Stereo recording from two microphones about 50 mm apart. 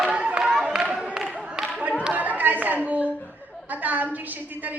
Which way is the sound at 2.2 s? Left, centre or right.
Right.